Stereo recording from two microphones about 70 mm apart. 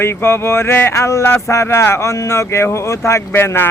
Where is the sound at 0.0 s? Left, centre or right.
Left.